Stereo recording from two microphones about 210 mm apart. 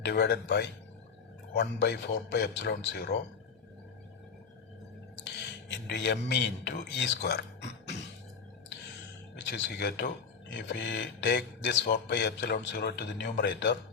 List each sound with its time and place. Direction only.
0.0 s a man's voice: 50° left (ahead or behind)
5.2 s speech: 55° left (ahead or behind)
9.5 s a man's voice: 55° left (ahead or behind)